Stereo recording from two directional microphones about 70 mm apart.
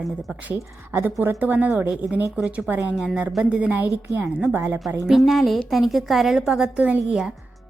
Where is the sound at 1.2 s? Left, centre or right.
Right.